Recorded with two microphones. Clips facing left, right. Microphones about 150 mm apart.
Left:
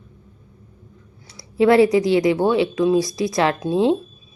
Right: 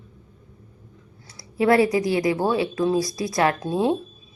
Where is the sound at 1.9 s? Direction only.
25° left (ahead or behind).